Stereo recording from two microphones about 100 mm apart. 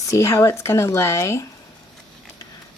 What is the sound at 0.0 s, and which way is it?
Speech, 30° left (ahead or behind).